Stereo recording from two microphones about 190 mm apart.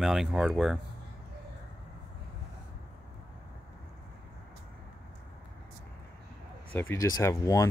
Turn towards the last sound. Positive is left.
turn(degrees=15)  # may be behind; listen again after turning